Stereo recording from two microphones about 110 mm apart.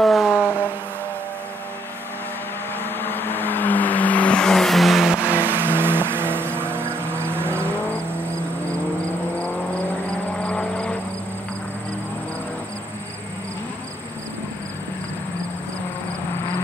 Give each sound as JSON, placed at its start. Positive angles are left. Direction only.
{"t": 0.0, "sound": "vehicle", "side_deg": 0}
{"t": 0.4, "sound": "vehicle", "side_deg": 20}
{"t": 2.8, "sound": "vehicle", "side_deg": 20}
{"t": 5.2, "sound": "vehicle", "side_deg": -15}
{"t": 10.4, "sound": "vehicle", "side_deg": 10}